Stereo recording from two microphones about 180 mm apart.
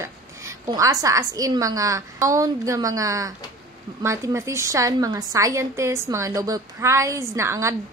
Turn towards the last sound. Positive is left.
turn(degrees=-15)  # may be behind; listen again after turning